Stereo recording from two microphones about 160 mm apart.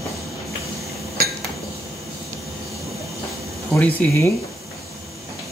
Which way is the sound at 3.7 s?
15° left (ahead or behind).